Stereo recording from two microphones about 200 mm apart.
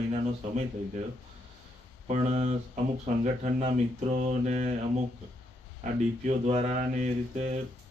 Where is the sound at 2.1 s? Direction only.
35° right (ahead or behind).